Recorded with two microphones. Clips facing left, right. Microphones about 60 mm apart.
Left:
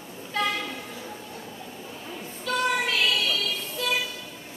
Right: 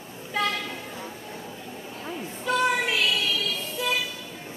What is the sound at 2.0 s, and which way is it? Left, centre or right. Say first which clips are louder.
Music: right 4 dB; centre.